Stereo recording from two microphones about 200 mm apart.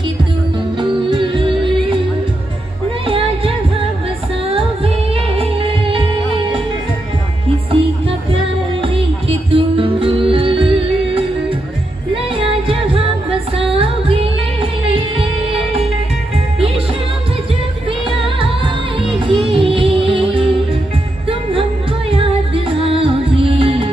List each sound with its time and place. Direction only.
0.7 s music: 25° right (ahead or behind)
3.1 s music: 30° right (ahead or behind)
4.6 s music: 30° right (ahead or behind)
9.5 s music: 25° right (ahead or behind)
18.4 s music: 25° right (ahead or behind)
22.1 s music: 25° right (ahead or behind)